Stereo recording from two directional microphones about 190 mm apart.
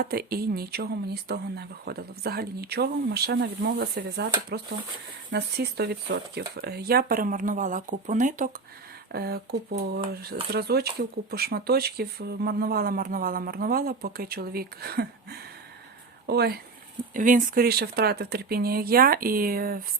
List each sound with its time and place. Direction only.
0.0 s speech: 55° right (ahead or behind)
9.1 s speech: 55° right (ahead or behind)
17.2 s speech: 45° right (ahead or behind)